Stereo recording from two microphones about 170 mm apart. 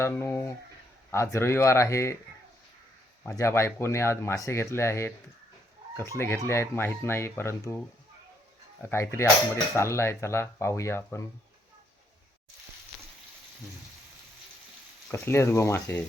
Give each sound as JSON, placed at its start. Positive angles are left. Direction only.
{"t": 0.0, "sound": "speech", "side_deg": 15}
{"t": 3.2, "sound": "speech", "side_deg": 15}
{"t": 8.8, "sound": "speech", "side_deg": 15}
{"t": 15.1, "sound": "speech", "side_deg": 15}